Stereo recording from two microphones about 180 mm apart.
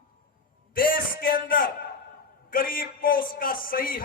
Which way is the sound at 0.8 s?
50° left (ahead or behind).